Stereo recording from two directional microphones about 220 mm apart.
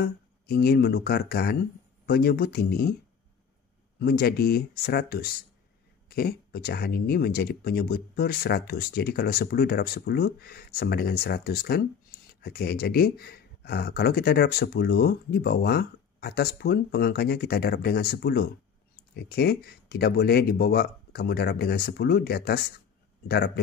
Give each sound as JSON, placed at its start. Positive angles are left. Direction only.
{"t": 0.0, "sound": "speech", "side_deg": 45}
{"t": 4.0, "sound": "speech", "side_deg": 45}